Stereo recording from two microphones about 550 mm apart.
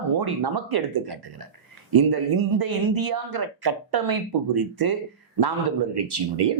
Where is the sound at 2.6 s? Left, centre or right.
Right.